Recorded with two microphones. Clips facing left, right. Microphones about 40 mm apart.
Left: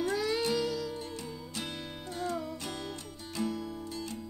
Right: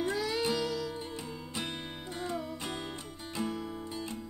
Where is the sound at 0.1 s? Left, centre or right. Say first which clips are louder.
Left 1 dB; centre.